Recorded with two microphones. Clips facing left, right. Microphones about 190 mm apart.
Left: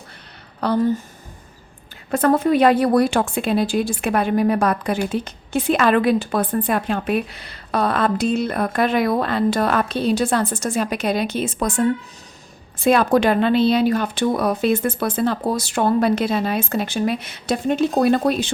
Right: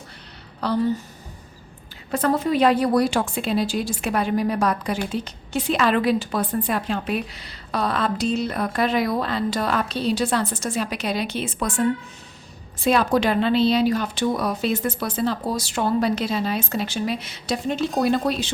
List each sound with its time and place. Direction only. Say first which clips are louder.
0.6 s a woman's voice: left 3 dB; 50° left (ahead or behind)
2.0 s a woman's voice: left 4 dB; 50° left (ahead or behind)
12.8 s a woman's voice: left 4 dB; 50° left (ahead or behind)